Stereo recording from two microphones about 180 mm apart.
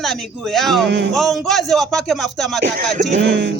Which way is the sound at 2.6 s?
50° right (ahead or behind).